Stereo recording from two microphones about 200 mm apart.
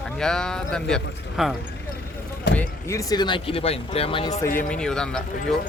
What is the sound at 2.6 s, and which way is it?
Speech, 15° left (ahead or behind).